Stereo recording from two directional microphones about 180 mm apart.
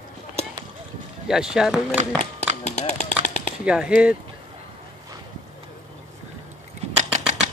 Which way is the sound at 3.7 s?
5° right (ahead or behind).